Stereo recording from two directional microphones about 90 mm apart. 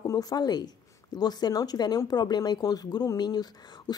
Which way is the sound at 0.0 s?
45° left (ahead or behind).